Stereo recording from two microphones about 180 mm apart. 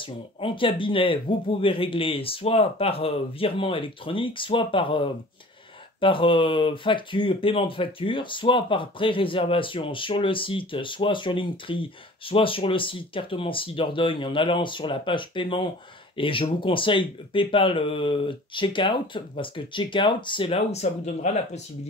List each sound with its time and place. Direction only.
0.4 s speech: 30° left (ahead or behind)